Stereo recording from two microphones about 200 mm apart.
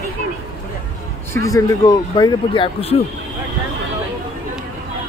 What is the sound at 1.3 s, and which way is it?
Speech, 15° left (ahead or behind).